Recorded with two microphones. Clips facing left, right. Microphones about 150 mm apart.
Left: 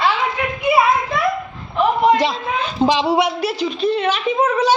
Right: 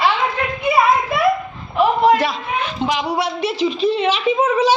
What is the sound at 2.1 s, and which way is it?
A man's voice, 25° left (ahead or behind).